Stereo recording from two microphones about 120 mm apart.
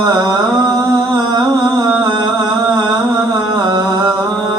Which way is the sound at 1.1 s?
30° right (ahead or behind).